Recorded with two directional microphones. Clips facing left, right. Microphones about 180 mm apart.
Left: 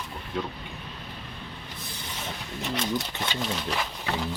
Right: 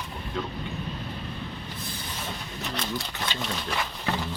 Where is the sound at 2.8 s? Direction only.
20° left (ahead or behind).